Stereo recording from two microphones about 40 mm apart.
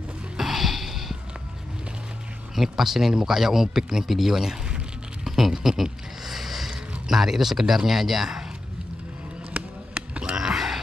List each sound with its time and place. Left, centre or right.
0.4 s music: centre
2.5 s speech: centre
4.6 s music: right
5.3 s a sound: centre
6.7 s speech: centre
9.5 s basketball bounce: right
10.2 s a sound: centre